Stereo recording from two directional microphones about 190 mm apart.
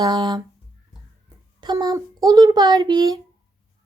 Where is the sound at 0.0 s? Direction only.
20° right (ahead or behind).